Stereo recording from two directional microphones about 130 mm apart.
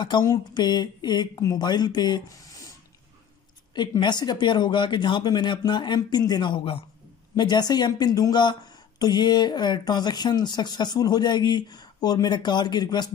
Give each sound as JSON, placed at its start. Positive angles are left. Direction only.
{"t": 0.0, "sound": "speech", "side_deg": 35}
{"t": 3.7, "sound": "speech", "side_deg": 35}